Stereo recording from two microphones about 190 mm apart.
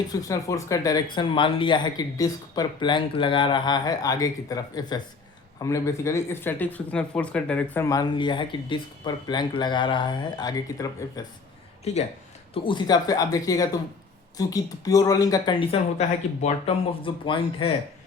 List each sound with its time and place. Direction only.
0.1 s speech: 15° left (ahead or behind)
12.6 s speech: 20° left (ahead or behind)